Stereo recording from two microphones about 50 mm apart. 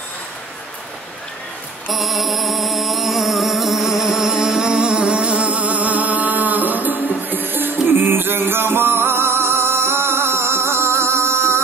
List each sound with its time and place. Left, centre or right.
1.9 s music: centre; by 11.6 s right